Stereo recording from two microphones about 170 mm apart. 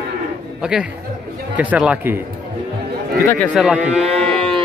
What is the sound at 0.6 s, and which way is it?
A man's voice, 5° right (ahead or behind).